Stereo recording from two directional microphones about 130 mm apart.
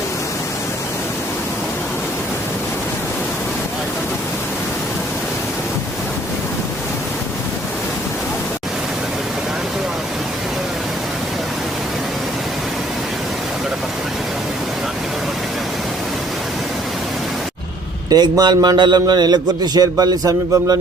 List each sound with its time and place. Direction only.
18.1 s a man's voice: 30° right (ahead or behind)